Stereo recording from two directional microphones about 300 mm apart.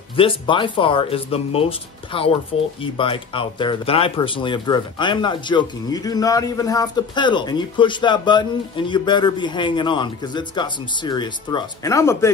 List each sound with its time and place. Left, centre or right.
0.1 s speech: centre